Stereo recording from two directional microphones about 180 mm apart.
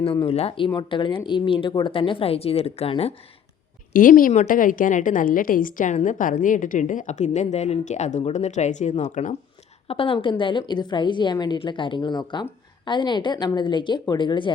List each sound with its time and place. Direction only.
0.0 s a woman's voice: 30° left (ahead or behind)
3.9 s a woman's voice: 50° left (ahead or behind)
9.9 s a woman's voice: 30° left (ahead or behind)